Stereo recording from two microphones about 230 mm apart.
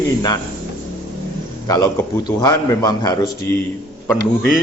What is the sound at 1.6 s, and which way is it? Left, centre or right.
A man's voice, centre.